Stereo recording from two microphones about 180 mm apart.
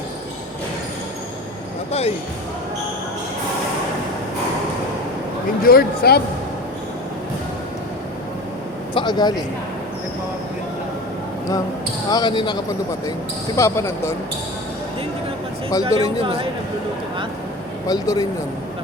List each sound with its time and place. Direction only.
1.9 s speech: 35° left (ahead or behind)
5.6 s speech: 60° left (ahead or behind)
9.0 s speech: 25° left (ahead or behind)
12.1 s speech: 25° left (ahead or behind)
13.6 s speech: 15° left (ahead or behind)
15.8 s speech: 30° right (ahead or behind)
17.8 s speech: 20° left (ahead or behind)